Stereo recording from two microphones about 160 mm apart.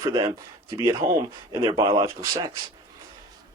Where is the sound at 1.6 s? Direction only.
30° right (ahead or behind).